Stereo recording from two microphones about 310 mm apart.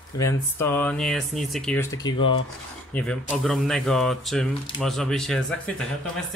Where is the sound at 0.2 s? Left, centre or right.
Centre.